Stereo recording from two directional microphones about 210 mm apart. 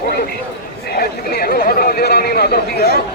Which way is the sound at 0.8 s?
50° left (ahead or behind).